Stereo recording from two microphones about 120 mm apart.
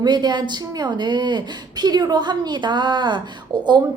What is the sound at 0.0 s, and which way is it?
A woman's voice, 35° right (ahead or behind).